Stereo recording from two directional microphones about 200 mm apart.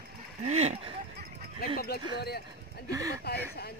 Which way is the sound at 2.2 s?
55° left (ahead or behind).